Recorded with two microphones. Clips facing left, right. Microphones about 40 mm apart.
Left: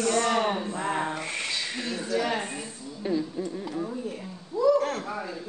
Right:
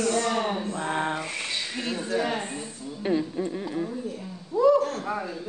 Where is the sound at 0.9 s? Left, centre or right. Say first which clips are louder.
Right 3 dB; right.